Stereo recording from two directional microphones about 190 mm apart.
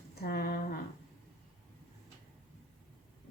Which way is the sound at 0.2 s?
55° left (ahead or behind).